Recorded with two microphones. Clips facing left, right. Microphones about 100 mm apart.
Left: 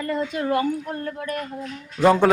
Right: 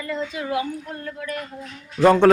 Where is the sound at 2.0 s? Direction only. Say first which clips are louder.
Right 2 dB; centre (ahead or behind).